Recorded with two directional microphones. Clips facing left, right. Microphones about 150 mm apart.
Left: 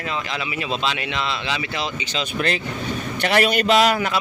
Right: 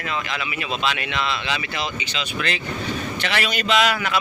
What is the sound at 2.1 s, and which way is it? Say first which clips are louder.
Speech: left 3 dB; 40° left (ahead or behind).